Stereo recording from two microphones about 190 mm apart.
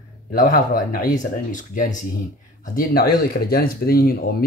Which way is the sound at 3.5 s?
50° left (ahead or behind).